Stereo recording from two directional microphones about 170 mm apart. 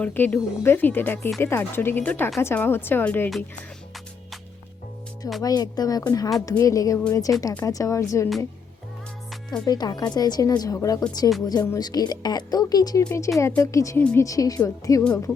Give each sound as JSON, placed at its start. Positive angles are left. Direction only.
{"t": 0.0, "sound": "speech", "side_deg": 10}
{"t": 5.4, "sound": "speech", "side_deg": 20}
{"t": 9.6, "sound": "speech", "side_deg": 25}
{"t": 14.0, "sound": "speech", "side_deg": 10}
{"t": 14.3, "sound": "speech", "side_deg": 20}